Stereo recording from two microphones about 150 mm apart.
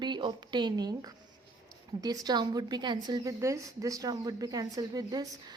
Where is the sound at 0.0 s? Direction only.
30° right (ahead or behind).